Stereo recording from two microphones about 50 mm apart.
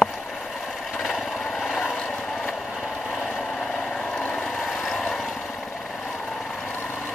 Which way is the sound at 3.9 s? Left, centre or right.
Centre.